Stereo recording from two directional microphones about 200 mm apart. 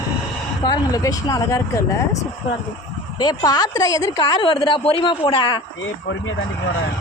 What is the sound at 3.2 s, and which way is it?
A woman's voice, 20° left (ahead or behind).